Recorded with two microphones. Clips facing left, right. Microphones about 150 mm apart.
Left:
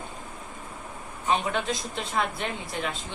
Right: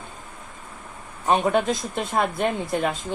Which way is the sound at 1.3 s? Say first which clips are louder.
Right 6 dB; 45° right (ahead or behind).